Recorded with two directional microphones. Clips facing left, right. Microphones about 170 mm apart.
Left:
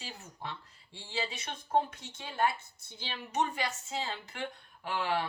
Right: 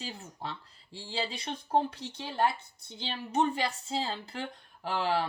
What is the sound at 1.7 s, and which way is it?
Speech, 30° right (ahead or behind).